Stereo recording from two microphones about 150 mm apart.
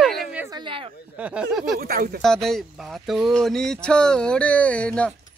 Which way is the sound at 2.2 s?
Centre (ahead or behind).